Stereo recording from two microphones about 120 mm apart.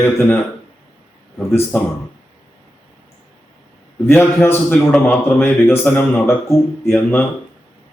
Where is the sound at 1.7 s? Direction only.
15° left (ahead or behind).